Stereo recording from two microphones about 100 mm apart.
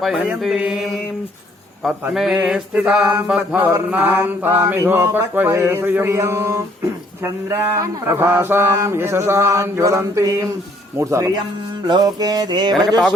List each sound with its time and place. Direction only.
0.0 s mantra: 10° right (ahead or behind); by 10.5 s 35° right (ahead or behind)
11.0 s music: 30° right (ahead or behind)